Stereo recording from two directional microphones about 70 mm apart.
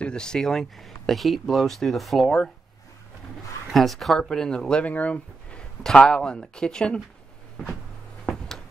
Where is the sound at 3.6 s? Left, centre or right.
Centre.